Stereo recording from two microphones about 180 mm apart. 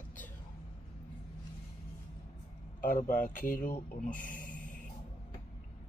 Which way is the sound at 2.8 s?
45° left (ahead or behind).